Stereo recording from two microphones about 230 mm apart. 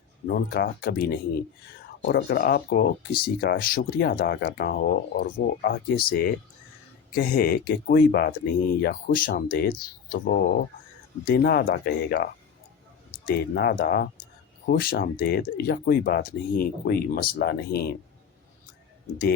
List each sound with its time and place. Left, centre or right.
0.3 s speech: left